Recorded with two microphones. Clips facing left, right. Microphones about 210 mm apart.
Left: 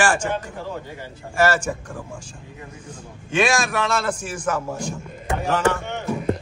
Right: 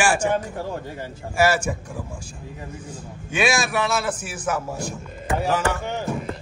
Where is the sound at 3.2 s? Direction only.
5° right (ahead or behind).